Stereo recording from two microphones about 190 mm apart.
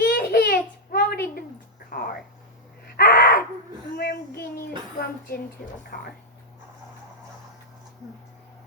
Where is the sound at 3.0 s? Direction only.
55° left (ahead or behind).